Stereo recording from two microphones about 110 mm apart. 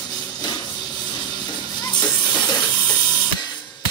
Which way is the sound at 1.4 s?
40° left (ahead or behind).